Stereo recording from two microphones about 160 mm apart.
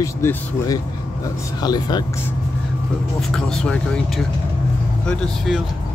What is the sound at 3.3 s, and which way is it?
Speech, 5° left (ahead or behind).